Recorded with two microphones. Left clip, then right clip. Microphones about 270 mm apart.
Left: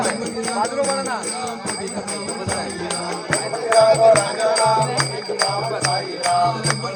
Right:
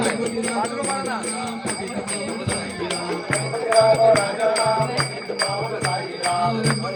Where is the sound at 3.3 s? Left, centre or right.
Left.